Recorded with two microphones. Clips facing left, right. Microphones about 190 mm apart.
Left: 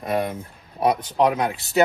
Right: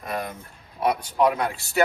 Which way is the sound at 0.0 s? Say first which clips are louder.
Left 7 dB; 25° left (ahead or behind).